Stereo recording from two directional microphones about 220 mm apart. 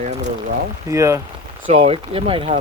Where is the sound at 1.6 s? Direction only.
25° right (ahead or behind).